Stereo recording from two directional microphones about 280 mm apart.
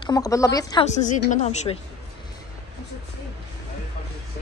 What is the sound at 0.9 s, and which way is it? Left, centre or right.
Speech, left.